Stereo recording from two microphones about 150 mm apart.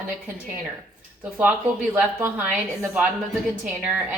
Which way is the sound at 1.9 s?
15° right (ahead or behind).